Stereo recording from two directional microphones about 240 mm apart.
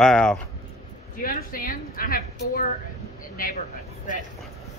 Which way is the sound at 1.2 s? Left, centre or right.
Left.